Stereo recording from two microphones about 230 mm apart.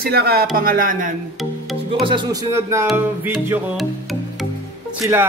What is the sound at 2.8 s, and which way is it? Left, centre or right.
Music, centre.